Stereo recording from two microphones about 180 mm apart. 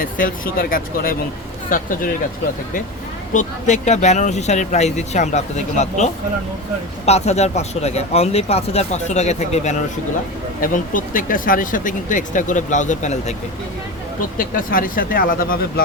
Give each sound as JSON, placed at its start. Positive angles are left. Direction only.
{"t": 0.0, "sound": "speech", "side_deg": 50}
{"t": 3.3, "sound": "speech", "side_deg": 40}
{"t": 10.6, "sound": "speech", "side_deg": 50}
{"t": 14.3, "sound": "speech", "side_deg": 50}